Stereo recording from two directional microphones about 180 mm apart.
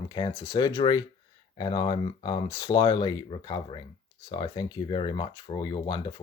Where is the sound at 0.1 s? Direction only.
25° left (ahead or behind).